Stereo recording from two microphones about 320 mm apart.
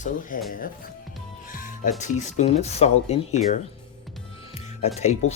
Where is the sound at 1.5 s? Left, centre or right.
Left.